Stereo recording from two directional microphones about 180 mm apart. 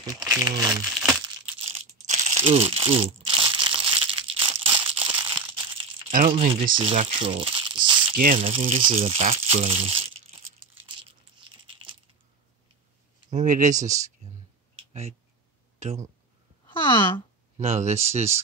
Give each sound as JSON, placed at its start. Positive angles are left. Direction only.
{"t": 0.2, "sound": "speech", "side_deg": -10}
{"t": 0.5, "sound": "speech", "side_deg": -20}
{"t": 0.8, "sound": "a sound", "side_deg": -5}
{"t": 2.0, "sound": "crumpling", "side_deg": -40}
{"t": 6.3, "sound": "speech", "side_deg": -35}
{"t": 7.0, "sound": "crumpling", "side_deg": -30}
{"t": 8.4, "sound": "speech", "side_deg": -35}
{"t": 13.3, "sound": "speech", "side_deg": -45}
{"t": 14.8, "sound": "a sound", "side_deg": -35}
{"t": 15.8, "sound": "speech", "side_deg": -35}
{"t": 16.9, "sound": "speech", "side_deg": 10}
{"t": 17.6, "sound": "speech", "side_deg": -40}